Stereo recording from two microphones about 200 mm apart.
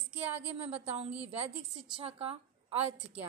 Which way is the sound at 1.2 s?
30° right (ahead or behind).